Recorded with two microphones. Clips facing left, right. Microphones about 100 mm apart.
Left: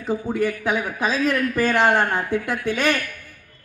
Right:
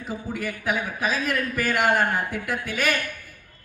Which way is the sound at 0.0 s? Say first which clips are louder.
Left 8 dB; 25° left (ahead or behind).